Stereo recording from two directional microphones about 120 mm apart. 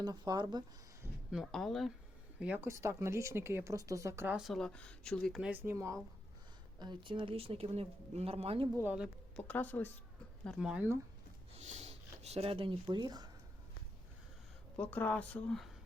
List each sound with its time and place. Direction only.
0.0 s speech: 35° right (ahead or behind)
1.3 s speech: centre (ahead or behind)
2.6 s speech: 25° right (ahead or behind)
4.3 s speech: 5° right (ahead or behind)
5.4 s speech: 15° right (ahead or behind)
5.7 s speech: 25° right (ahead or behind)
6.7 s speech: 40° right (ahead or behind)
8.8 s speech: 15° right (ahead or behind)
9.3 s speech: 15° left (ahead or behind)
10.6 s speech: 5° right (ahead or behind)
11.5 s speech: 70° right (ahead or behind); by 13.2 s 35° right (ahead or behind)
14.8 s speech: 15° left (ahead or behind)